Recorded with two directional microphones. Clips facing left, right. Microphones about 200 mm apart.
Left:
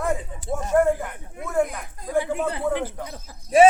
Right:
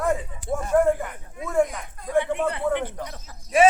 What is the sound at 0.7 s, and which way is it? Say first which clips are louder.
A man's voice: even; centre (ahead or behind).